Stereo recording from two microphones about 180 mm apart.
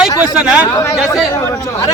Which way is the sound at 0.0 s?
5° right (ahead or behind).